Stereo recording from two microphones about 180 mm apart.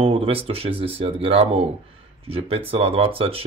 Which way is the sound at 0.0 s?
30° right (ahead or behind).